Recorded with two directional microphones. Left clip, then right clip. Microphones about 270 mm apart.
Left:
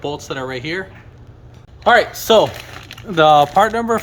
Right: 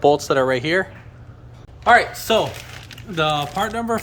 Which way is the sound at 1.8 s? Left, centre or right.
Left.